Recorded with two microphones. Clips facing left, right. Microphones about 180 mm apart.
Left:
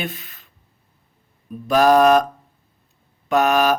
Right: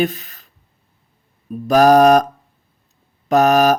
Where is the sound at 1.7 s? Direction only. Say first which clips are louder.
Right 3 dB; 40° right (ahead or behind).